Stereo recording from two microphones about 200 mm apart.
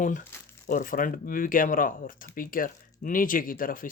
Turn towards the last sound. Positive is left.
turn(degrees=45)  # may be behind; listen again after turning